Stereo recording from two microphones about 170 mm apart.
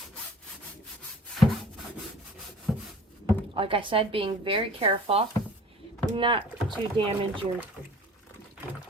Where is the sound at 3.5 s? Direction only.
30° right (ahead or behind).